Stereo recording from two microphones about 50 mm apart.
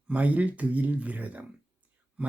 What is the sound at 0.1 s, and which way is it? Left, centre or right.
Speech, right.